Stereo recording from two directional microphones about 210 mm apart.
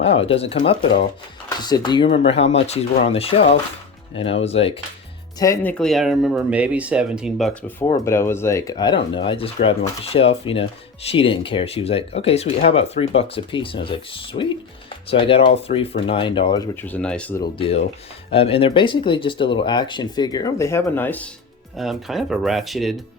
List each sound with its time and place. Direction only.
0.0 s speech: 25° left (ahead or behind)
5.4 s speech: 10° left (ahead or behind)
7.9 s speech: 15° left (ahead or behind)
16.7 s speech: 10° left (ahead or behind)
17.4 s speech: 25° left (ahead or behind); by 23.0 s centre (ahead or behind)